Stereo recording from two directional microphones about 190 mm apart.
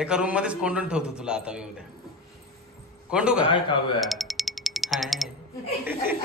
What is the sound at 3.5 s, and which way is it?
Speech, 25° left (ahead or behind).